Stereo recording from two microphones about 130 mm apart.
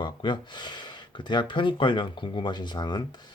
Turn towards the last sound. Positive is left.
turn(degrees=35)  # may be behind; listen again after turning